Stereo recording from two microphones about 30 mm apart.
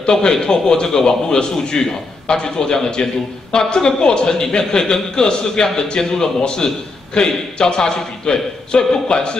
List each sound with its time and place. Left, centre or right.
0.0 s a man's voice: left